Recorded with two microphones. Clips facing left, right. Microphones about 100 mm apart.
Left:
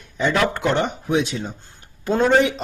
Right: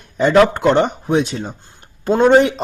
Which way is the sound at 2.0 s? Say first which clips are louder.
Right 5 dB; 30° right (ahead or behind).